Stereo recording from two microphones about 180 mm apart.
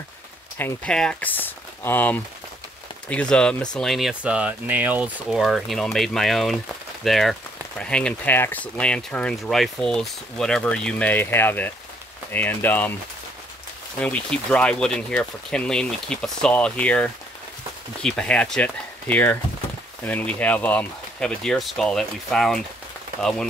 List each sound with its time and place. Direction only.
0.6 s speech: 10° left (ahead or behind)
13.9 s speech: 5° left (ahead or behind)